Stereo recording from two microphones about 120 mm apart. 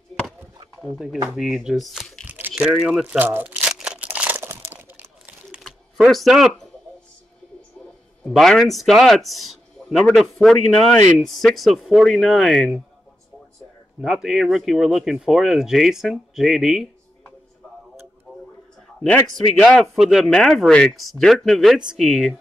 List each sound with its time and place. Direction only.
0.7 s speech: centre (ahead or behind)
2.2 s typing: 15° right (ahead or behind)
2.6 s speech: 5° right (ahead or behind)
3.2 s crumpling: 15° right (ahead or behind)
6.0 s speech: centre (ahead or behind)
8.3 s speech: 5° left (ahead or behind)
14.0 s speech: 5° right (ahead or behind)
18.9 s speech: 10° left (ahead or behind)